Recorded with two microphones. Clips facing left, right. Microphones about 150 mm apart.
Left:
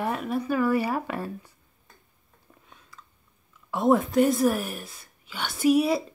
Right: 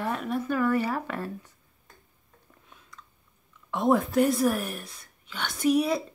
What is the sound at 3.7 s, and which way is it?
Speech, centre (ahead or behind).